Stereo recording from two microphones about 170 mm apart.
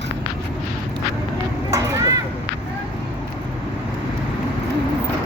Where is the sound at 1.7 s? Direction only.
20° right (ahead or behind).